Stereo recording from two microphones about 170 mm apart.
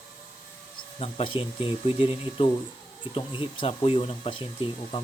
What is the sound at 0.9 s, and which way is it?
Speech, 35° left (ahead or behind).